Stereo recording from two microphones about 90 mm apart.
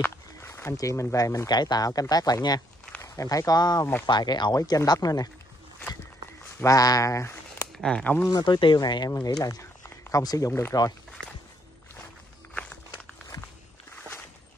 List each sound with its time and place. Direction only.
0.0 s speech: 30° left (ahead or behind); by 2.6 s 45° left (ahead or behind)
3.0 s speech: 35° left (ahead or behind); by 4.6 s 55° left (ahead or behind)
4.6 s speech: 45° left (ahead or behind)
6.6 s speech: 40° left (ahead or behind)
7.8 s speech: 10° left (ahead or behind)
8.3 s speech: 55° left (ahead or behind)
12.5 s a sound: 15° left (ahead or behind)